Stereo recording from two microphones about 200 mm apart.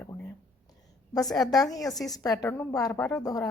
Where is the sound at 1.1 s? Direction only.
20° left (ahead or behind).